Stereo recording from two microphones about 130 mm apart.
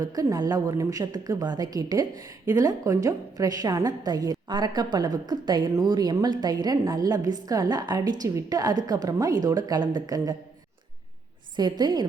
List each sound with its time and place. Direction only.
0.0 s a woman's voice: 25° right (ahead or behind)
11.5 s a woman's voice: 35° right (ahead or behind)